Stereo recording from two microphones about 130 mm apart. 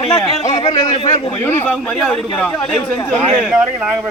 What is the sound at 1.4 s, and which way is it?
A man's voice, 15° left (ahead or behind).